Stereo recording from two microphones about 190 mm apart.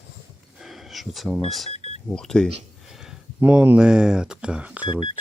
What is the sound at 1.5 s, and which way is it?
Speech, centre (ahead or behind).